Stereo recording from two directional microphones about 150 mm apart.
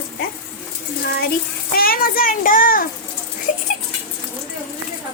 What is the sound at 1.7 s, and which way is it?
A child's voice, 80° left.